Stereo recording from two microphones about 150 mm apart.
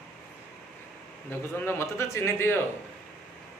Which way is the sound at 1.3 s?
15° left (ahead or behind).